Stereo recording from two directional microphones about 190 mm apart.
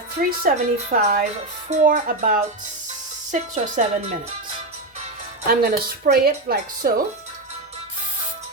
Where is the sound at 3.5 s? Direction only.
40° right (ahead or behind).